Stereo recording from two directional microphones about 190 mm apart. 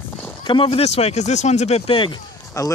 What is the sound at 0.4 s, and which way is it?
Speech, 25° left (ahead or behind).